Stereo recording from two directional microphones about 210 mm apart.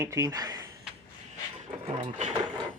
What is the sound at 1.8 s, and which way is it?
Speech, 35° right (ahead or behind).